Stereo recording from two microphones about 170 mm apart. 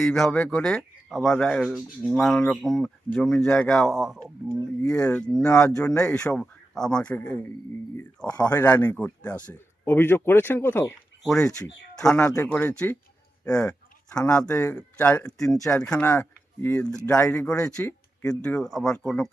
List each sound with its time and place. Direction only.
0.0 s a man's voice: 5° left (ahead or behind)
5.5 s speech: 20° left (ahead or behind)
5.8 s a man's voice: 5° left (ahead or behind)
8.4 s a man's voice: 20° left (ahead or behind)
11.2 s a man's voice: centre (ahead or behind)